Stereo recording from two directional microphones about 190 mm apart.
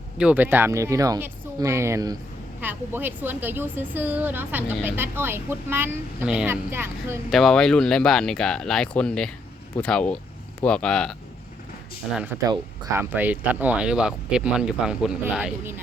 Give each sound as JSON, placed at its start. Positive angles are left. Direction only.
{"t": 0.2, "sound": "a woman's voice", "side_deg": -10}
{"t": 7.3, "sound": "speech", "side_deg": 0}
{"t": 12.1, "sound": "a woman's voice", "side_deg": -10}